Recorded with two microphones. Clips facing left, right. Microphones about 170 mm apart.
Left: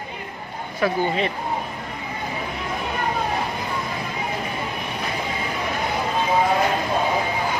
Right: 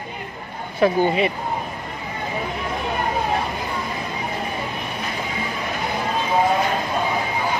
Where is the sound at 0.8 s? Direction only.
25° right (ahead or behind).